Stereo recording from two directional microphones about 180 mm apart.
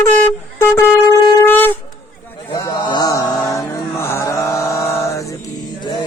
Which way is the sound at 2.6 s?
25° left (ahead or behind).